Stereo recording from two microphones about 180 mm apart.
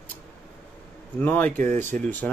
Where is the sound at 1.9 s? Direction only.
50° right (ahead or behind).